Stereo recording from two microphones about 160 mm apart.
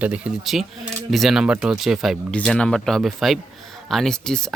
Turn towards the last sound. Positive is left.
turn(degrees=5)  # may be behind; listen again after turning